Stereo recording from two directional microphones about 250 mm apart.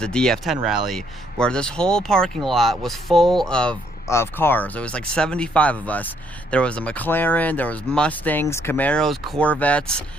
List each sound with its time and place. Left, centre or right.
0.0 s speech: centre